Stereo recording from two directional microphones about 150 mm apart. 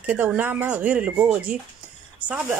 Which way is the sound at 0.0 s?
10° right (ahead or behind).